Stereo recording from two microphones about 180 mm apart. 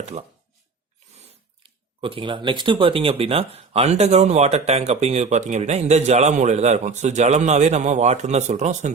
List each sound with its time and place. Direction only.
2.0 s speech: 30° right (ahead or behind)